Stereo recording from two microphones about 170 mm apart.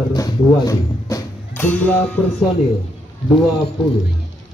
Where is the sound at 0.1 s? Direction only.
20° left (ahead or behind).